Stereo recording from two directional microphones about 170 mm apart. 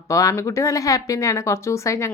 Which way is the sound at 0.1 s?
20° left (ahead or behind).